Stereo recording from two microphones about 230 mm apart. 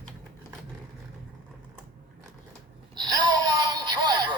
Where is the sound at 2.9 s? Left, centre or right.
Centre.